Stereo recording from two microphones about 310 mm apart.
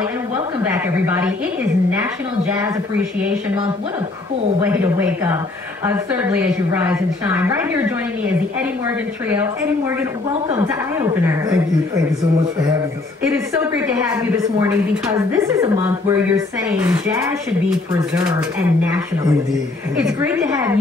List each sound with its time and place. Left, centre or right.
1.0 s speech: centre
5.9 s a woman's voice: centre
11.2 s speech: centre
16.8 s a woman's voice: centre
20.0 s speech: centre